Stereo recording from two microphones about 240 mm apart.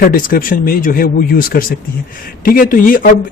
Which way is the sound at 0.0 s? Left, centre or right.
Left.